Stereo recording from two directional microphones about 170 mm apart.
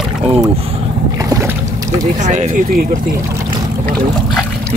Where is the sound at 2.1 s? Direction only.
45° right (ahead or behind).